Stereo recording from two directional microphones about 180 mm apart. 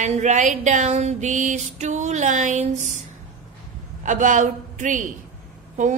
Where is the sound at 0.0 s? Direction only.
40° right (ahead or behind).